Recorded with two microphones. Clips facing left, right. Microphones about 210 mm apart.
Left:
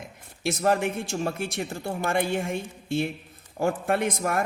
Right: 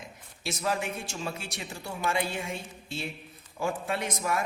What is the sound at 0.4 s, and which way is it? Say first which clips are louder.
A man's voice: left 7 dB; 55° left (ahead or behind).